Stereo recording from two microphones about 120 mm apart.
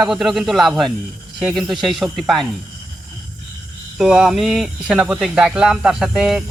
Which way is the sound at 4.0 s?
5° right (ahead or behind).